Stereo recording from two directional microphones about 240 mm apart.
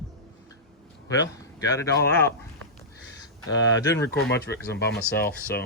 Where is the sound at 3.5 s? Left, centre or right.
Left.